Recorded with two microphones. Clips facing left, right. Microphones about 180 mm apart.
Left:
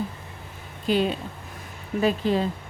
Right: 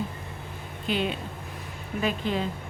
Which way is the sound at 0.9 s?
40° left (ahead or behind).